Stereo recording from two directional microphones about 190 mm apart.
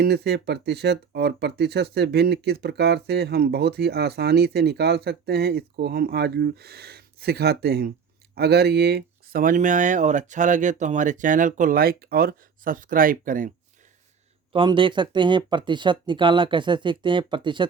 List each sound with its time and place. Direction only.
0.0 s speech: 60° right (ahead or behind)
14.5 s speech: 25° right (ahead or behind)